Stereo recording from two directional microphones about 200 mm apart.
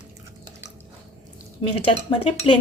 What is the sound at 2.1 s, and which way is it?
Speech, 25° left (ahead or behind).